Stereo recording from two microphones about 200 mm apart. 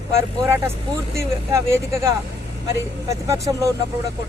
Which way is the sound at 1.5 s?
15° right (ahead or behind).